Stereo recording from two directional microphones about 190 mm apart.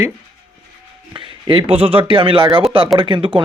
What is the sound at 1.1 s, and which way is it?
Speech, 25° right (ahead or behind).